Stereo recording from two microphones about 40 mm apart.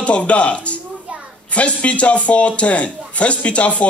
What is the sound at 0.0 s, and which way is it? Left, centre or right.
Speech, left.